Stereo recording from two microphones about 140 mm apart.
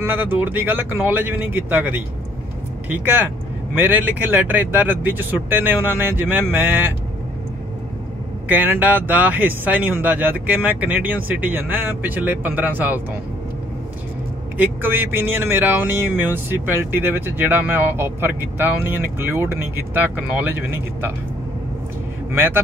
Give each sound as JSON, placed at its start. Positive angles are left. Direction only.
{"t": 0.0, "sound": "speech", "side_deg": -15}
{"t": 8.5, "sound": "speech", "side_deg": -15}
{"t": 14.6, "sound": "speech", "side_deg": -15}